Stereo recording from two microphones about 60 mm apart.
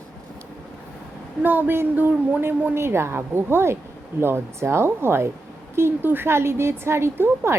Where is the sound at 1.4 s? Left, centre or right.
Right.